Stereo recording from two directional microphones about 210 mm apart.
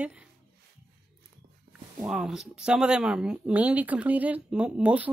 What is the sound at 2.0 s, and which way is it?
Speech, 5° right (ahead or behind).